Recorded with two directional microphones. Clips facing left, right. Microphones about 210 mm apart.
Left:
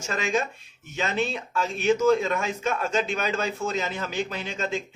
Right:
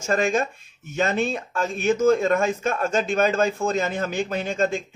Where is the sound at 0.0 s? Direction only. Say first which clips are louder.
Right 5 dB; 50° right (ahead or behind).